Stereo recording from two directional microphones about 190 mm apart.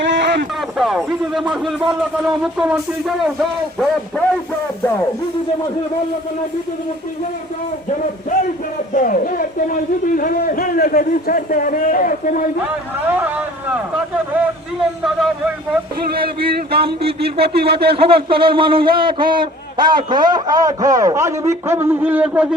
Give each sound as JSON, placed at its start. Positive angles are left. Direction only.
{"t": 0.0, "sound": "a sound", "side_deg": -70}
{"t": 0.8, "sound": "speech", "side_deg": 0}
{"t": 8.9, "sound": "a man's voice", "side_deg": 45}
{"t": 15.0, "sound": "speech", "side_deg": -5}
{"t": 16.1, "sound": "speech", "side_deg": -55}
{"t": 17.2, "sound": "speech", "side_deg": -30}